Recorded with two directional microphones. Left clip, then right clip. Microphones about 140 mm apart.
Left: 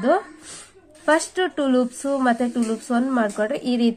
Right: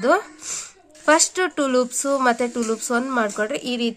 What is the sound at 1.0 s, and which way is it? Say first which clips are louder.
A woman's voice: right 2 dB; 30° right (ahead or behind).